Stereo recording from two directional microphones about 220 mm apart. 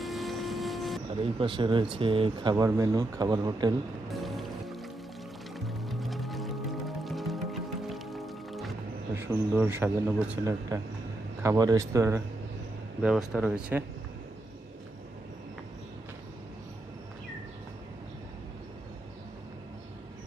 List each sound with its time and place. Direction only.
0.0 s vehicle: centre (ahead or behind)
1.2 s speech: 25° right (ahead or behind)
4.1 s music: centre (ahead or behind)
9.1 s speech: 10° right (ahead or behind)